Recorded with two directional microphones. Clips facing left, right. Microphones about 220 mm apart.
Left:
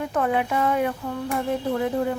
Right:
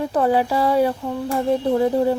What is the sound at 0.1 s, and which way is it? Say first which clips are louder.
Speech: right 5 dB; 35° right (ahead or behind).